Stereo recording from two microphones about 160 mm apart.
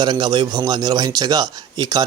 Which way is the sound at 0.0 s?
25° right (ahead or behind).